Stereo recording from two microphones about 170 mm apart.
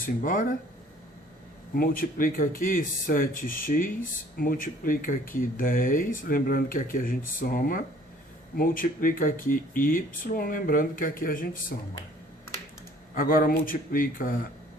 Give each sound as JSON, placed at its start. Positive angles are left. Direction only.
{"t": 0.0, "sound": "speech", "side_deg": 55}
{"t": 1.7, "sound": "speech", "side_deg": 60}
{"t": 13.1, "sound": "speech", "side_deg": 55}